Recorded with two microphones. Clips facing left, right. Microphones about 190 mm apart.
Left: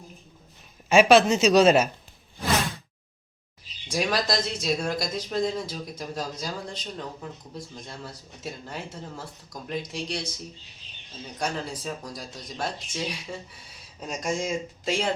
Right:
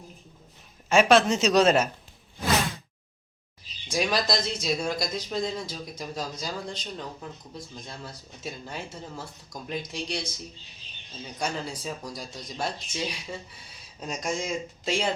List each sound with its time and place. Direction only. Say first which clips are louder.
0.9 s speech: left 2 dB; 5° left (ahead or behind)
3.9 s speech: even; centre (ahead or behind)
11.3 s speech: left 1 dB; centre (ahead or behind)